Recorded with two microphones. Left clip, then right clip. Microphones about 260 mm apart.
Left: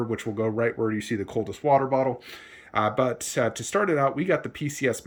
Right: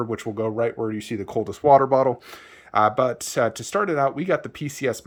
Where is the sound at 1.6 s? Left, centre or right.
Right.